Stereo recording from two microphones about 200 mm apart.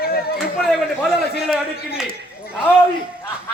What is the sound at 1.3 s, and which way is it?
Speech, 50° left (ahead or behind).